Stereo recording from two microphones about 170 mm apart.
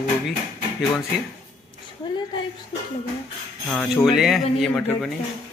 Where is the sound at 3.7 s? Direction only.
5° left (ahead or behind).